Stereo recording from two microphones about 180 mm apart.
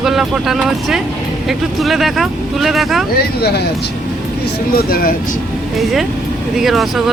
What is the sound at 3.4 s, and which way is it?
Speech, 65° left (ahead or behind).